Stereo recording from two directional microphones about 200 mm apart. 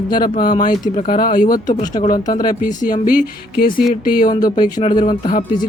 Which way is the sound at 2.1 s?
20° left (ahead or behind).